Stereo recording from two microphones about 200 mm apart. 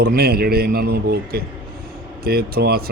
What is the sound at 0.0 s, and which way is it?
Speech, 50° right (ahead or behind).